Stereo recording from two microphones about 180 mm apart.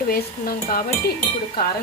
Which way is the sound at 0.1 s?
55° left (ahead or behind).